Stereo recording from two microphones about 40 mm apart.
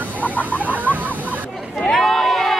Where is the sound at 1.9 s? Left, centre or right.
Centre.